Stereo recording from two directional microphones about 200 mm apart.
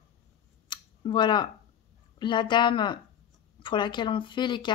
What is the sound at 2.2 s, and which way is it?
Speech, 25° left (ahead or behind).